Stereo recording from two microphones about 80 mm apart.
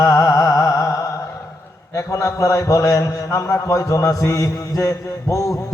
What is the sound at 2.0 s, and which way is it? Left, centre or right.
A man's voice, left.